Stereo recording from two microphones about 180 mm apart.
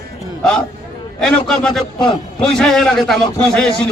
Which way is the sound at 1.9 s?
25° left (ahead or behind).